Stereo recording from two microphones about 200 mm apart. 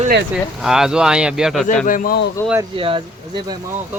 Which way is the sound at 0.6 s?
Centre (ahead or behind).